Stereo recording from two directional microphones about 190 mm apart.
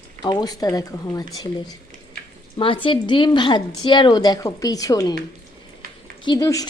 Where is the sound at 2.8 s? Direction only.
25° left (ahead or behind).